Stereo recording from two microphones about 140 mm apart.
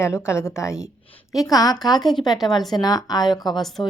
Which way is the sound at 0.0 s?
20° left (ahead or behind).